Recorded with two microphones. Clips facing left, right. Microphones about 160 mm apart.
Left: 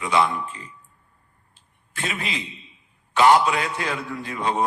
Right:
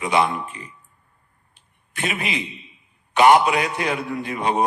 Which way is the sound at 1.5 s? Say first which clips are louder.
Right 2 dB; 20° right (ahead or behind).